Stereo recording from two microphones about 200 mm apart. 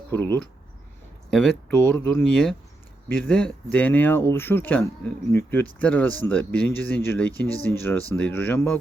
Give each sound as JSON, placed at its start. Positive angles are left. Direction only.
{"t": 0.1, "sound": "speech", "side_deg": 10}